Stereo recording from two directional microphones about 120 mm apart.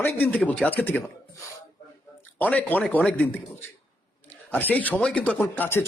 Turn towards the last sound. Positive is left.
turn(degrees=15)  # may be behind; listen again after turning